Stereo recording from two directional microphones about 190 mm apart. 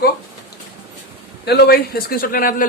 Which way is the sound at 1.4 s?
55° left (ahead or behind).